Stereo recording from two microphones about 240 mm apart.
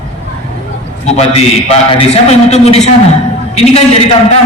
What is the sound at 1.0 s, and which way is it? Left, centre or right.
A man's voice, left.